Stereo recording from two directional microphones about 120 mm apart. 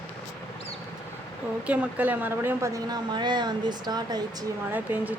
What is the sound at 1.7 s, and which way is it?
A woman's voice, 10° right (ahead or behind).